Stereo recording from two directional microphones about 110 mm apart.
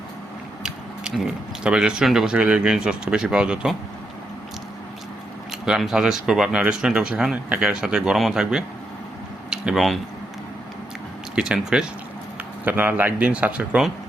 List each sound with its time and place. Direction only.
0.6 s speech: 5° right (ahead or behind)
5.5 s speech: 5° right (ahead or behind)
11.3 s speech: 10° right (ahead or behind)